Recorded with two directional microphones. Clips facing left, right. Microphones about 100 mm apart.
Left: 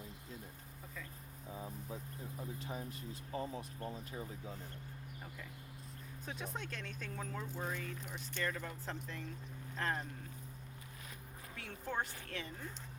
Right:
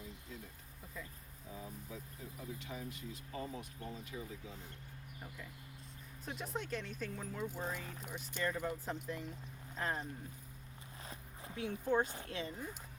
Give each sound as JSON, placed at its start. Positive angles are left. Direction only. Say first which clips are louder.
{"t": 2.6, "sound": "speech", "louder": "left 1 dB", "side_deg": 35}
{"t": 6.2, "sound": "speech", "louder": "right 2 dB", "side_deg": 0}
{"t": 11.1, "sound": "speech", "louder": "right 5 dB", "side_deg": -25}